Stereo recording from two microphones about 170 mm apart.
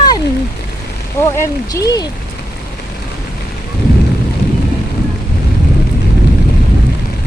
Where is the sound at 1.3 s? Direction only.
15° left (ahead or behind).